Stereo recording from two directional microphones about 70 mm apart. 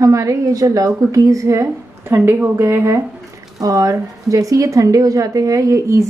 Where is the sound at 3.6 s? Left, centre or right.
Right.